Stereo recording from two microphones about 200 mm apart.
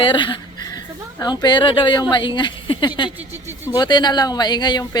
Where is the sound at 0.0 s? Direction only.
25° left (ahead or behind).